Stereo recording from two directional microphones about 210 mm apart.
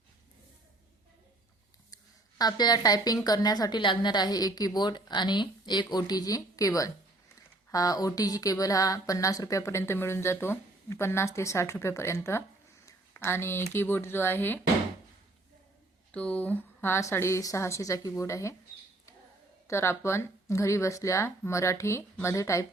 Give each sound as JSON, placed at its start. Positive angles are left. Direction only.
{"t": 2.4, "sound": "a woman's voice", "side_deg": 20}
{"t": 16.1, "sound": "speech", "side_deg": 5}
{"t": 19.6, "sound": "speech", "side_deg": 10}